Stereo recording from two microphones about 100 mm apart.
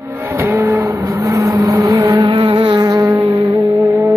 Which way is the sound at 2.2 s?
55° right (ahead or behind).